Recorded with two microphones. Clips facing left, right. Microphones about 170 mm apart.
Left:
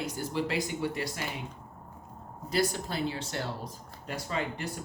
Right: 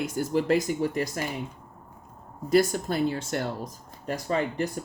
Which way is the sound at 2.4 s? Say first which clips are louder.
Right 7 dB; 50° right (ahead or behind).